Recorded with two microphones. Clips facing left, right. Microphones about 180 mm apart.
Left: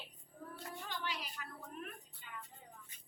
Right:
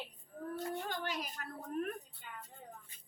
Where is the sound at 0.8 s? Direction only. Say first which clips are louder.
Right 4 dB; 45° right (ahead or behind).